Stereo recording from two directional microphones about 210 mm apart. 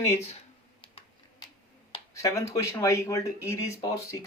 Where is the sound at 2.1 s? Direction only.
15° left (ahead or behind).